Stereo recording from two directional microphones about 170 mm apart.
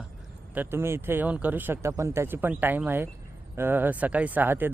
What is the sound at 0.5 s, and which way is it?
Speech, 10° right (ahead or behind).